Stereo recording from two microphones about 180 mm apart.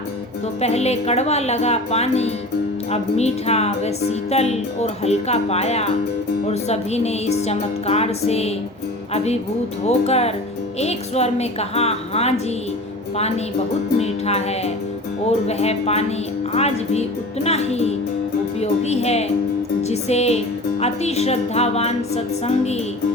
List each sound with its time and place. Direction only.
0.6 s speech: 35° left (ahead or behind)
9.8 s speech: 35° left (ahead or behind)